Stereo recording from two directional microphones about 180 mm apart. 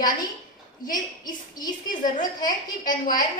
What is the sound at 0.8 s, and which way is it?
A woman's voice, 50° left (ahead or behind).